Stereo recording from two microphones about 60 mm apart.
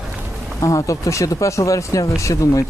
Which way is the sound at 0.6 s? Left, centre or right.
Left.